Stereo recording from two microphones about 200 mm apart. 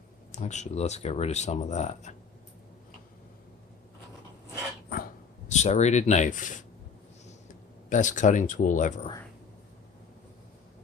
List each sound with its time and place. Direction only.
0.3 s speech: 35° left (ahead or behind)
5.5 s speech: 35° left (ahead or behind)
7.9 s speech: 40° left (ahead or behind)